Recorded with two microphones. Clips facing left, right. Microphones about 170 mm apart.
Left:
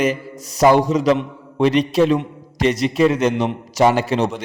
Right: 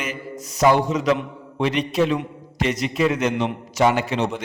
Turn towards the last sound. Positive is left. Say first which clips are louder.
# left 3 dB
turn(degrees=35)  # may be behind; listen again after turning